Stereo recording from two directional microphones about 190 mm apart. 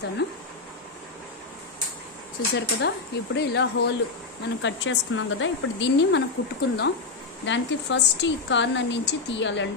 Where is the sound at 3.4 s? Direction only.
65° left (ahead or behind).